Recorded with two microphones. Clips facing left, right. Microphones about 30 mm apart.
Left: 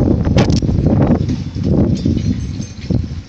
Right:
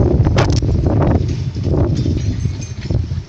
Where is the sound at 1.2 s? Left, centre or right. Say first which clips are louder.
Left 3 dB; left.